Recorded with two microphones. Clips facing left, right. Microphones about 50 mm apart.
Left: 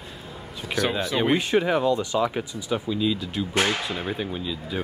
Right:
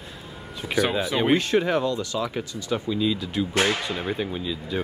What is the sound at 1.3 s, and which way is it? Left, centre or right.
Speech, centre.